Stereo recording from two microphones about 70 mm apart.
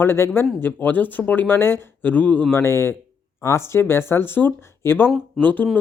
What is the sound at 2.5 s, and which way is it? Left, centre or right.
Speech, left.